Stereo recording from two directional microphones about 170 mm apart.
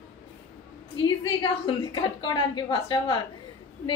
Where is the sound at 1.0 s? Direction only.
25° left (ahead or behind).